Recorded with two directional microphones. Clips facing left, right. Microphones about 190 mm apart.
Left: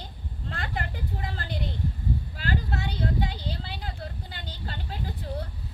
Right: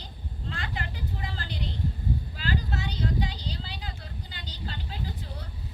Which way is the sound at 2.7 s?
60° left (ahead or behind).